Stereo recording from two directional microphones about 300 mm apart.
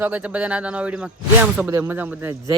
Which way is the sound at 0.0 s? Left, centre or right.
Centre.